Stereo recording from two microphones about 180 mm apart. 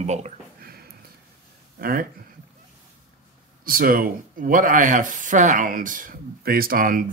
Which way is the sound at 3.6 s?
50° right (ahead or behind).